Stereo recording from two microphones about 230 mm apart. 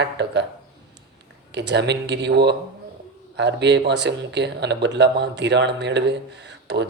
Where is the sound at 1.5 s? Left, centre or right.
Right.